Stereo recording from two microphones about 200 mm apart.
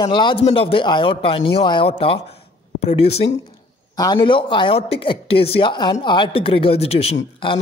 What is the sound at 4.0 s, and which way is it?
Speech, 20° left (ahead or behind).